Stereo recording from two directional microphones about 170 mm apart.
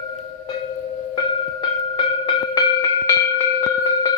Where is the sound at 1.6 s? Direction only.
30° left (ahead or behind).